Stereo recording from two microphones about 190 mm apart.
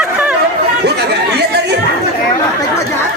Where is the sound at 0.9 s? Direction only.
60° right (ahead or behind).